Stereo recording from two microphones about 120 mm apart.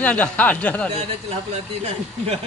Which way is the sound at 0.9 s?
60° right (ahead or behind).